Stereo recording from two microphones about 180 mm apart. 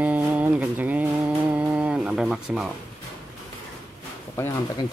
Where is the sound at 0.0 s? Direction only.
10° right (ahead or behind).